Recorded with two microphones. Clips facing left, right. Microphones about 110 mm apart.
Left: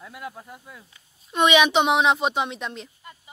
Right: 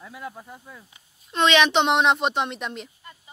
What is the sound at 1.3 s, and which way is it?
A woman's voice, 10° left (ahead or behind).